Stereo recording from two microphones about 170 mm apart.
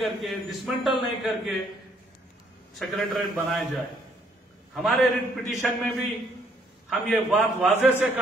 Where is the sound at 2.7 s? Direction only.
Centre (ahead or behind).